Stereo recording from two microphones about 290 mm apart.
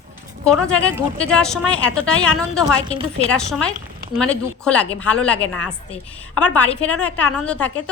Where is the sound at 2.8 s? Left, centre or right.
Centre.